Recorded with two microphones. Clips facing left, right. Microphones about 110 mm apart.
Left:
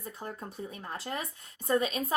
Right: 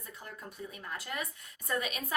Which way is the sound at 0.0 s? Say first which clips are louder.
Left 6 dB; 30° left (ahead or behind).